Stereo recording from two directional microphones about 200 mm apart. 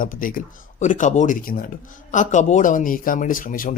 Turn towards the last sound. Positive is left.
turn(degrees=40)  # may be behind; listen again after turning